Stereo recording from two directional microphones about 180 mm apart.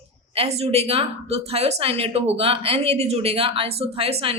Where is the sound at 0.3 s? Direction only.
35° right (ahead or behind).